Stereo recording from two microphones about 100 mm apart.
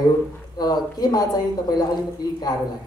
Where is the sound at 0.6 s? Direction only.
40° left (ahead or behind).